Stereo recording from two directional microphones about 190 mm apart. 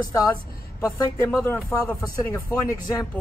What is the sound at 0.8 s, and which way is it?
Speech, 15° left (ahead or behind).